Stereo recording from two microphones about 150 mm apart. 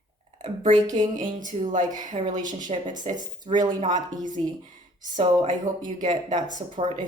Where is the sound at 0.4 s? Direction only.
55° right (ahead or behind).